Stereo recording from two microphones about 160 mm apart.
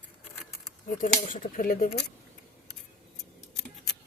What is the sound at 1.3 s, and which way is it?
Speech, 60° left (ahead or behind).